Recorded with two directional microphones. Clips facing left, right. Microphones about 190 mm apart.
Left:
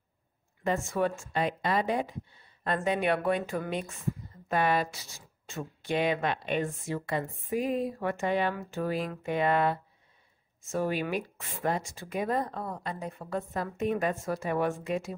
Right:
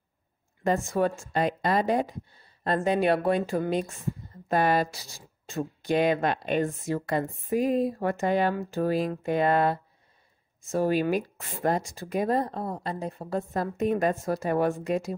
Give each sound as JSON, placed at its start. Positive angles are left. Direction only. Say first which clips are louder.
{"t": 0.7, "sound": "speech", "louder": "right 4 dB", "side_deg": -40}